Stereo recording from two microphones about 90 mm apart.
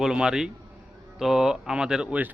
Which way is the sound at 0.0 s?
5° right (ahead or behind).